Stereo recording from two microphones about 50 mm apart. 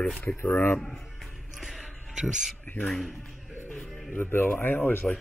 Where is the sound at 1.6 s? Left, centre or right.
Centre.